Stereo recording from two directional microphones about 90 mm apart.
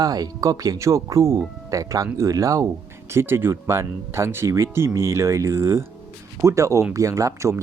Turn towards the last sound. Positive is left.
turn(degrees=-35)  # may be behind; listen again after turning